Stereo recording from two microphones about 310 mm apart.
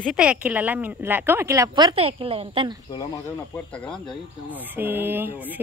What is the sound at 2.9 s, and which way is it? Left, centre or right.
Speech, centre.